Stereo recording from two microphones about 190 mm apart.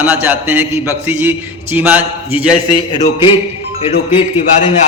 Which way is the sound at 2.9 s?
25° left (ahead or behind).